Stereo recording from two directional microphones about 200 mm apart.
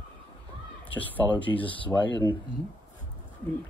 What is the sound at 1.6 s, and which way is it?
Speech, 25° left (ahead or behind).